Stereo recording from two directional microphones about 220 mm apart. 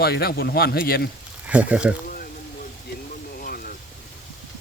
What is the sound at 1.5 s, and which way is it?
Music, 5° right (ahead or behind).